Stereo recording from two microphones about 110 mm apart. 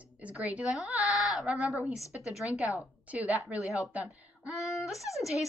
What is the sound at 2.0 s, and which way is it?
Speech, 30° left (ahead or behind).